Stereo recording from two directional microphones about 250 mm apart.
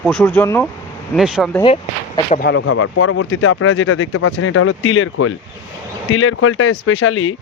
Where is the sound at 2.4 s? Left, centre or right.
Left.